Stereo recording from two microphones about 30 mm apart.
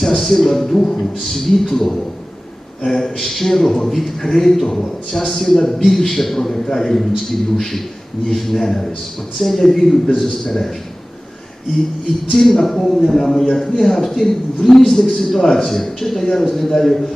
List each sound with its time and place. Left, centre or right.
0.0 s a man's voice: centre
12.4 s a man's voice: centre